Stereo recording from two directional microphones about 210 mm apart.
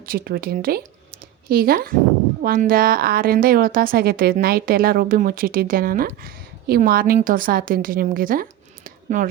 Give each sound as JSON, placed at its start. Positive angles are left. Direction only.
{"t": 0.0, "sound": "a woman's voice", "side_deg": -45}